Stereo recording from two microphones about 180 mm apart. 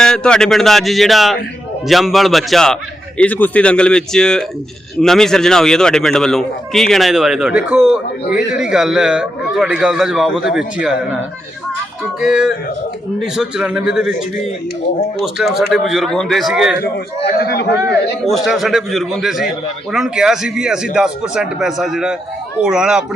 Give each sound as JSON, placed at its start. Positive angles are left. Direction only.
{"t": 0.0, "sound": "a man's voice", "side_deg": 5}
{"t": 12.2, "sound": "a man's voice", "side_deg": -5}
{"t": 16.8, "sound": "a man's voice", "side_deg": 60}
{"t": 18.3, "sound": "a man's voice", "side_deg": 0}